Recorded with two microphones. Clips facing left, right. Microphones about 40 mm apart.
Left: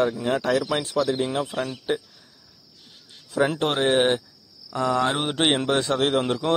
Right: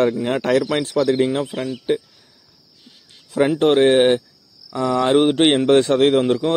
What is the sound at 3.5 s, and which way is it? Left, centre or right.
Speech, right.